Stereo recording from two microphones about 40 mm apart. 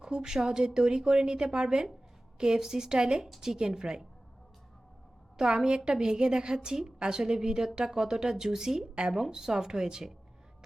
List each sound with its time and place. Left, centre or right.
0.0 s a woman's voice: centre
5.4 s a woman's voice: centre